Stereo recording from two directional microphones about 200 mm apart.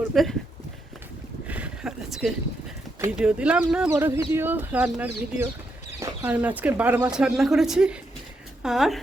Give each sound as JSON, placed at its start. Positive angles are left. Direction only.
{"t": 0.1, "sound": "speech", "side_deg": 0}
{"t": 1.5, "sound": "a sound", "side_deg": -5}
{"t": 3.0, "sound": "speech", "side_deg": -5}